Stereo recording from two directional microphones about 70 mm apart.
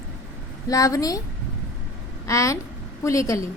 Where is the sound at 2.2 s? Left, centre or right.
Left.